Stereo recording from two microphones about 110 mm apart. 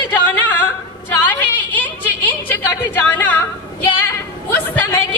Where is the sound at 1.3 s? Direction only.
15° left (ahead or behind).